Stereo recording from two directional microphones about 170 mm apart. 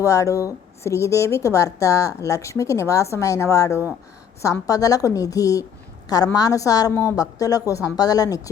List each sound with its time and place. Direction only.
0.0 s a woman's voice: 20° left (ahead or behind)